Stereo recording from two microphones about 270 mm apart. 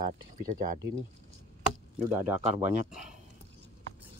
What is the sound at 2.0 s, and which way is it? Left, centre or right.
Speech, centre.